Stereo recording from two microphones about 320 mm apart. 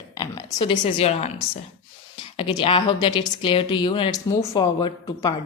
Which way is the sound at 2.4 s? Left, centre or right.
Centre.